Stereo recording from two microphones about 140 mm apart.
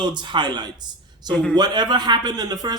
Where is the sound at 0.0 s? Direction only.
30° right (ahead or behind).